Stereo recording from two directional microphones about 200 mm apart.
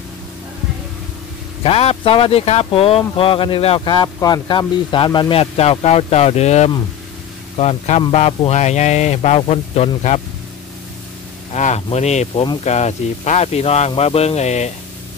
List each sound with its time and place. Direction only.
1.6 s speech: 30° left (ahead or behind)
11.5 s speech: 35° left (ahead or behind)